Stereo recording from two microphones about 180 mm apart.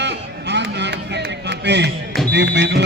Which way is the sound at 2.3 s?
70° right (ahead or behind).